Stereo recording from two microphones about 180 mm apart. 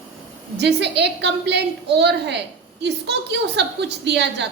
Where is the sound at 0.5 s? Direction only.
70° right (ahead or behind).